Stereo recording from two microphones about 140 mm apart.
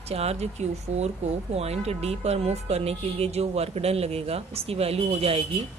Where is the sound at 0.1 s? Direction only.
50° right (ahead or behind).